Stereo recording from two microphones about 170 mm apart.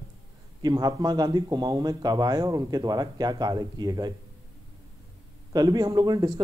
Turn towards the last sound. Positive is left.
turn(degrees=-25)  # may be behind; listen again after turning